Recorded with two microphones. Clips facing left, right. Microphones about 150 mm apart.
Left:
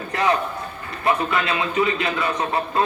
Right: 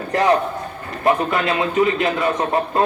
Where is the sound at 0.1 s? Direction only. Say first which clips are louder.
Right 5 dB; 45° right (ahead or behind).